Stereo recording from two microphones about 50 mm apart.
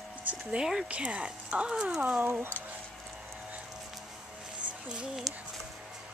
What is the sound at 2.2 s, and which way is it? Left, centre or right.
Speech, right.